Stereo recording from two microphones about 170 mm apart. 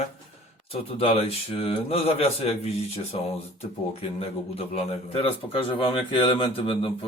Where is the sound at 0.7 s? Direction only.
35° left (ahead or behind).